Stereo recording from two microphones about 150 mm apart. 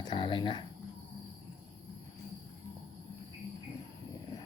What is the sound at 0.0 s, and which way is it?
Speech, 30° left (ahead or behind).